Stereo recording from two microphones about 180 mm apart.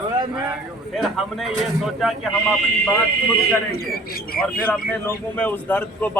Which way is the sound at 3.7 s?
55° left (ahead or behind).